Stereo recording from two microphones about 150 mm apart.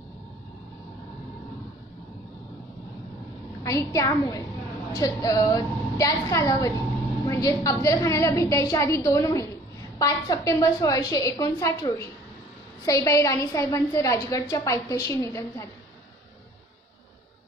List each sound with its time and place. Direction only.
3.6 s a woman's voice: 20° left (ahead or behind)